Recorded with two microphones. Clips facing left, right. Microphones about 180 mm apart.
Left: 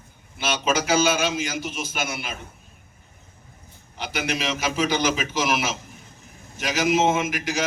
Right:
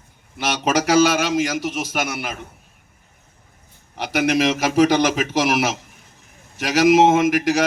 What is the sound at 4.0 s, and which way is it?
A man's voice, 70° right (ahead or behind).